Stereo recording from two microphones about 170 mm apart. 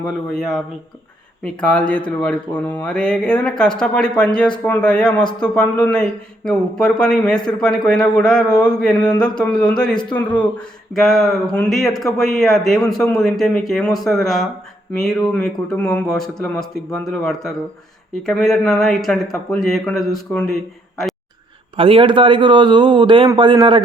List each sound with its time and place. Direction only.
0.0 s a man's voice: centre (ahead or behind)
21.8 s a man's voice: 30° right (ahead or behind)